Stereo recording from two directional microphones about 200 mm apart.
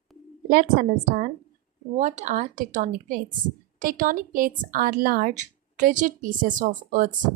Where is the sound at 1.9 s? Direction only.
35° right (ahead or behind).